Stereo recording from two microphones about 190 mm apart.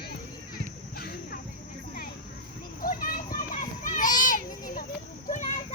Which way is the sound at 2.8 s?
50° left (ahead or behind).